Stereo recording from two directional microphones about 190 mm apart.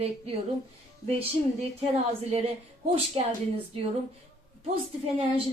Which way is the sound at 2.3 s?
30° right (ahead or behind).